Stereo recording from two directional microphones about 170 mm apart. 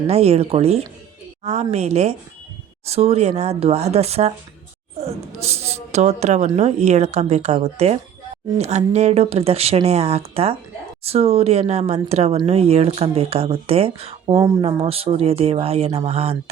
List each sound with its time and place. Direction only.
0.1 s a woman's voice: 35° right (ahead or behind)